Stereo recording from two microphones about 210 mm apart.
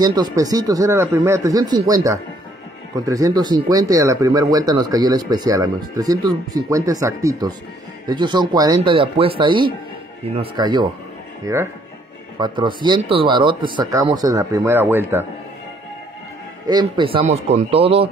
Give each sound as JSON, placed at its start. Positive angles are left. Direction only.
{"t": 0.0, "sound": "speech", "side_deg": -20}
{"t": 16.6, "sound": "speech", "side_deg": -20}